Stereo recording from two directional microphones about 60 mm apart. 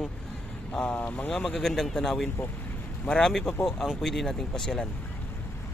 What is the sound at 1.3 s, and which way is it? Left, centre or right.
Speech, centre.